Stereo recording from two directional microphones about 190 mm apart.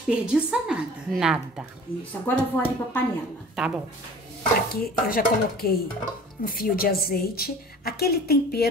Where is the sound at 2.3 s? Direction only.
10° left (ahead or behind).